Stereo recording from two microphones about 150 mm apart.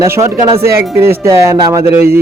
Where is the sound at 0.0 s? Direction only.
20° right (ahead or behind).